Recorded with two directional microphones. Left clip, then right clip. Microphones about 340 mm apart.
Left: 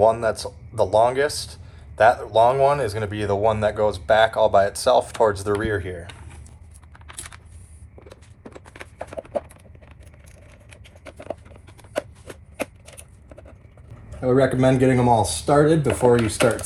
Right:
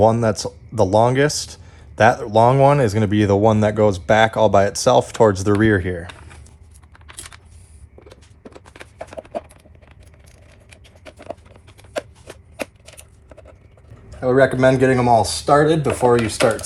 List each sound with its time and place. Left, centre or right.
0.3 s speech: right
6.1 s a sound: centre
6.9 s keys jangling: centre
8.1 s clip-clop: centre
10.7 s scissors: centre
11.8 s shuffling cards: centre
14.1 s speech: centre